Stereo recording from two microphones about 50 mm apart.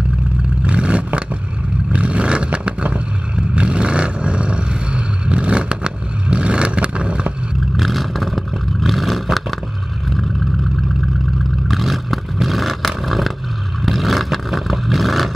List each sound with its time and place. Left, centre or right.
0.7 s vehicle: right
7.7 s vehicle: centre
11.6 s vehicle: centre